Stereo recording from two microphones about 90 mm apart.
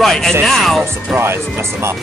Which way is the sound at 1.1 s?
25° right (ahead or behind).